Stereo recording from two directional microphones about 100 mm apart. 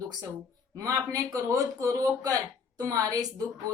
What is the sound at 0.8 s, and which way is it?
A woman's voice, 35° right (ahead or behind).